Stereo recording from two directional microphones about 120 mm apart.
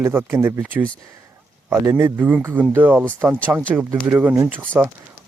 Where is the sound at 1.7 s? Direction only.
20° right (ahead or behind).